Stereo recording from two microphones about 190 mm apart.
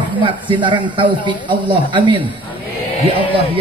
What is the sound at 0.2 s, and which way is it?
A man's voice, 25° right (ahead or behind).